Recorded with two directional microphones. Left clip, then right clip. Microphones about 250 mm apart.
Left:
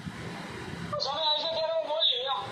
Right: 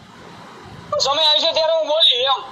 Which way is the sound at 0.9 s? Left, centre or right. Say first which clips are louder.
Right 13 dB; right.